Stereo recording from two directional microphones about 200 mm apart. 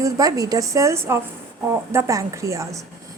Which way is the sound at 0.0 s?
20° right (ahead or behind).